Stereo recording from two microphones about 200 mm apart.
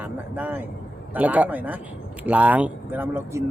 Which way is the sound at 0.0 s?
10° right (ahead or behind).